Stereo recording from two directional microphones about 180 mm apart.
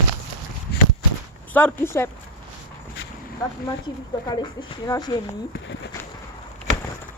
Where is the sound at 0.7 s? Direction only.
65° left (ahead or behind).